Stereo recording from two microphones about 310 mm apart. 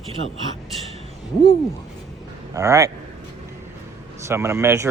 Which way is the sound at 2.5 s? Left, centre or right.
Centre.